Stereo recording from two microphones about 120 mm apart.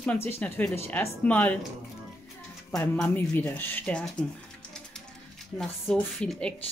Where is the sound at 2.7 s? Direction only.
10° left (ahead or behind).